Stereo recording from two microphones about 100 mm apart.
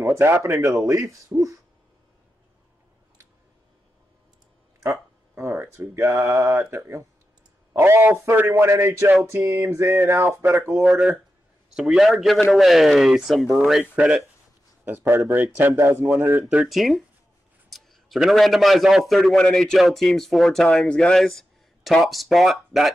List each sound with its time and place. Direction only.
0.0 s speech: 30° right (ahead or behind)
1.3 s a sound: 30° right (ahead or behind)
4.8 s speech: 30° right (ahead or behind)
10.8 s a man's voice: centre (ahead or behind)
14.9 s speech: 25° right (ahead or behind)
16.4 s a man's voice: 5° right (ahead or behind)